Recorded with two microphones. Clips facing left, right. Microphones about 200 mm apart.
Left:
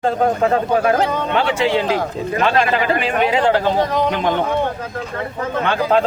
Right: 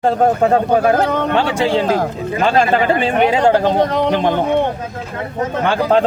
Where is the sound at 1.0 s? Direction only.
60° right (ahead or behind).